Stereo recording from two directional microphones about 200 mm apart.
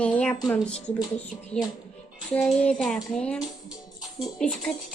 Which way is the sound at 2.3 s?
Centre (ahead or behind).